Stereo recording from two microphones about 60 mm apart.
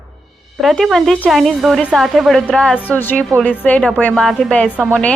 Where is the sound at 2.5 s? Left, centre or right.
Centre.